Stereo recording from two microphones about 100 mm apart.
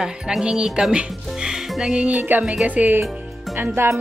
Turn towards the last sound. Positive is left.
turn(degrees=-25)  # may be behind; listen again after turning